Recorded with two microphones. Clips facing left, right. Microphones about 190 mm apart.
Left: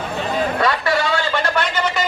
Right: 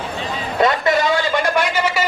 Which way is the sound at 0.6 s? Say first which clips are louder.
Right 8 dB; 20° right (ahead or behind).